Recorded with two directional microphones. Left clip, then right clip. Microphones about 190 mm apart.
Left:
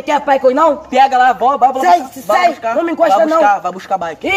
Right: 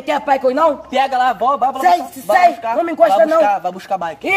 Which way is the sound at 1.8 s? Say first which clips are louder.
Left 3 dB; 5° left (ahead or behind).